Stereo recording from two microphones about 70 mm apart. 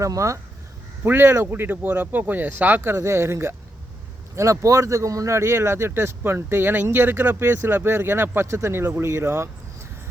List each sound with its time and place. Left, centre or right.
0.0 s speech: right
1.0 s speech: right
2.8 s speech: right